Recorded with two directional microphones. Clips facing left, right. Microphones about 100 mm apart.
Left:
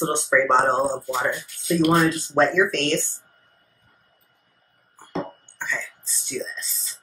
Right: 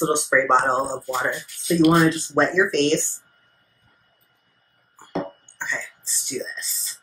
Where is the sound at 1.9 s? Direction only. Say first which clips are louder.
Right 2 dB; 15° right (ahead or behind).